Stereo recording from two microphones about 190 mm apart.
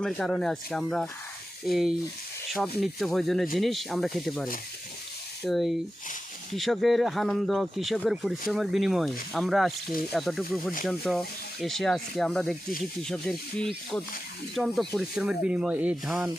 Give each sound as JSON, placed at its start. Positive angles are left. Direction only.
{"t": 0.0, "sound": "speech", "side_deg": 5}
{"t": 5.5, "sound": "speech", "side_deg": 0}